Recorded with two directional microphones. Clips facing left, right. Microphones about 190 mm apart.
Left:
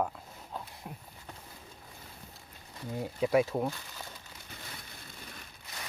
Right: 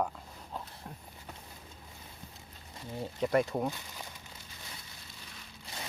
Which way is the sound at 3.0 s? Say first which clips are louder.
Left 2 dB; 5° left (ahead or behind).